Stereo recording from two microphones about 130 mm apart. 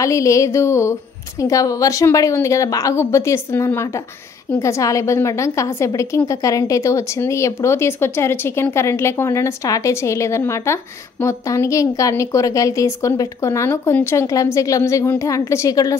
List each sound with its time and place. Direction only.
0.0 s a woman's voice: 25° left (ahead or behind)